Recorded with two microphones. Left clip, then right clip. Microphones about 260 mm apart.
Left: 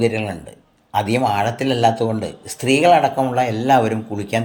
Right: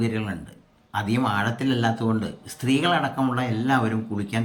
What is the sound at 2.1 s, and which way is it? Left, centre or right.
Speech, centre.